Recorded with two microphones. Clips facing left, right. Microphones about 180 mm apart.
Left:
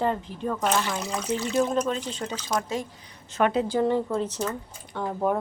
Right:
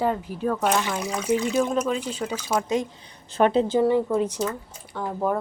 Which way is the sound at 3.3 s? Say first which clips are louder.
Right 4 dB; 30° right (ahead or behind).